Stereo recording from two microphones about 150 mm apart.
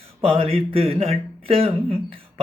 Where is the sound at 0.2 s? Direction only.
40° right (ahead or behind).